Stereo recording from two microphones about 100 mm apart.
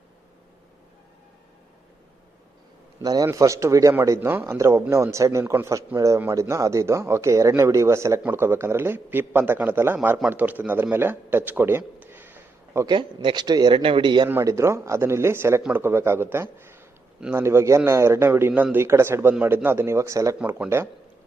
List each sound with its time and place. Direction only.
3.0 s a man's voice: 40° right (ahead or behind); by 11.8 s 20° right (ahead or behind)
11.8 s a sound: 15° right (ahead or behind)
12.9 s speech: 55° right (ahead or behind)
13.8 s speech: 55° right (ahead or behind)
14.4 s speech: 30° right (ahead or behind)
20.4 s speech: 10° right (ahead or behind)